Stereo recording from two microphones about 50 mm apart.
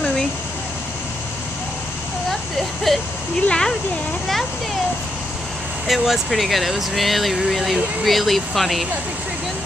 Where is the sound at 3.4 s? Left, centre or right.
Centre.